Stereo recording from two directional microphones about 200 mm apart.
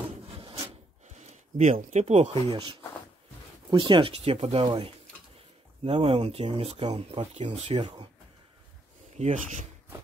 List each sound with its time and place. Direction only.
0.3 s filing: 25° right (ahead or behind)
1.6 s speech: 35° right (ahead or behind)
9.1 s speech: 35° right (ahead or behind)